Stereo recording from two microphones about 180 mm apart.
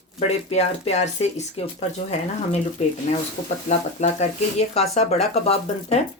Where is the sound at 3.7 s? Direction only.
40° left (ahead or behind).